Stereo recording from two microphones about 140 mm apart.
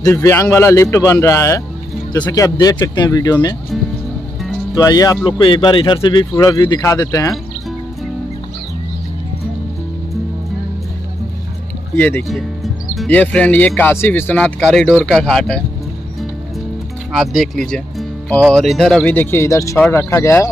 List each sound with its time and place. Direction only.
0.0 s a man's voice: 20° left (ahead or behind)
2.5 s speech: 35° left (ahead or behind)
4.7 s a man's voice: 25° left (ahead or behind)
5.4 s speech: 35° left (ahead or behind)
11.9 s speech: 15° left (ahead or behind)
12.3 s music: centre (ahead or behind)
13.1 s speech: 10° left (ahead or behind)
17.1 s speech: centre (ahead or behind)
19.1 s a man's voice: 20° left (ahead or behind)